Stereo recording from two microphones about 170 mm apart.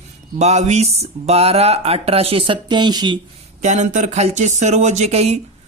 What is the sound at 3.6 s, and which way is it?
Speech, 45° right (ahead or behind).